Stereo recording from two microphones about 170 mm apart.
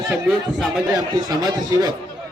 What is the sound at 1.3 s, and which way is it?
Speech, 25° right (ahead or behind).